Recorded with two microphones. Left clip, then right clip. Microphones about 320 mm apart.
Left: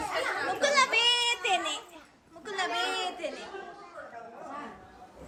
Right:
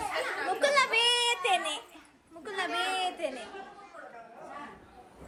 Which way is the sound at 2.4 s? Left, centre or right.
Centre.